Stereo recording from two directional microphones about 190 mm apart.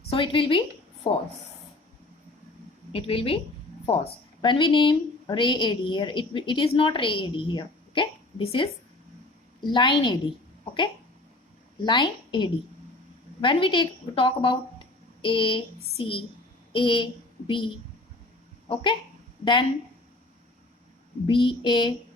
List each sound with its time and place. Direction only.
0.1 s a woman's voice: 30° left (ahead or behind)
2.9 s a woman's voice: 30° left (ahead or behind)
11.8 s a woman's voice: 25° left (ahead or behind)
18.7 s a woman's voice: 25° left (ahead or behind)
21.2 s a woman's voice: 25° left (ahead or behind)